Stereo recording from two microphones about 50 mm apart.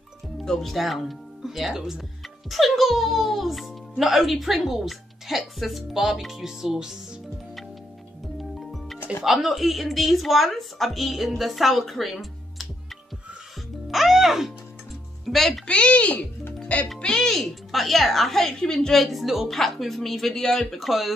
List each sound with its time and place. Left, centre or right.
0.5 s a woman's voice: centre
8.5 s music: centre
9.2 s a woman's voice: centre
13.8 s music: centre
15.2 s a woman's voice: centre
15.6 s speech: left
17.0 s a woman's voice: centre
18.9 s a woman's voice: centre